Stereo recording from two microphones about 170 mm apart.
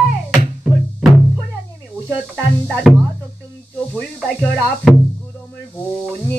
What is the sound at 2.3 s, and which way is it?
Speech, 5° left (ahead or behind).